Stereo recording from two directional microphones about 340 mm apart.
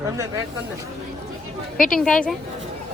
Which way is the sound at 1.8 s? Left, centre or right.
Centre.